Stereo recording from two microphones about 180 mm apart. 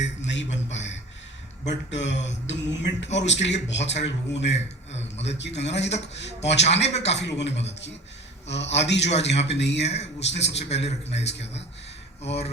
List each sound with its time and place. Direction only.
0.2 s a sound: 85° left
1.6 s speech: 80° left
4.9 s a sound: 35° left (ahead or behind)
5.2 s speech: 75° left (ahead or behind)
10.8 s a man's voice: 35° left (ahead or behind)
11.3 s speech: 75° left (ahead or behind)
12.2 s a man's voice: 35° left (ahead or behind)